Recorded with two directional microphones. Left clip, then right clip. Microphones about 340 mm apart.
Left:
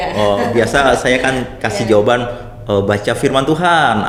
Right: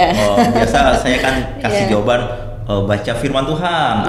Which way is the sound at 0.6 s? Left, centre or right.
Left.